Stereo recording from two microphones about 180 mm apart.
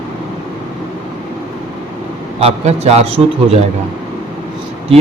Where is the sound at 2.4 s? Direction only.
35° right (ahead or behind).